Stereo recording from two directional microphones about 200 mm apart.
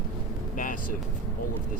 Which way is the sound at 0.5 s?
40° left (ahead or behind).